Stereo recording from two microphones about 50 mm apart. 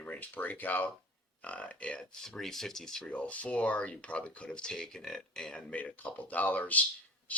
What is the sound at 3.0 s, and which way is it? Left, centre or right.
Speech, left.